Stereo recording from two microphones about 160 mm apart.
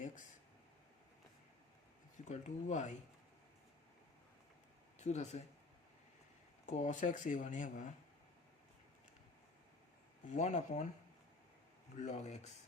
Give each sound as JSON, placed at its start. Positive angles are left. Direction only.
{"t": 2.1, "sound": "speech", "side_deg": 45}
{"t": 4.9, "sound": "speech", "side_deg": 45}
{"t": 6.7, "sound": "speech", "side_deg": 50}
{"t": 10.2, "sound": "speech", "side_deg": 45}
{"t": 11.9, "sound": "speech", "side_deg": 45}